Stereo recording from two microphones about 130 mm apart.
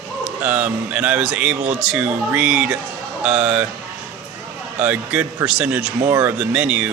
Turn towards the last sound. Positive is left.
turn(degrees=-10)  # may be behind; listen again after turning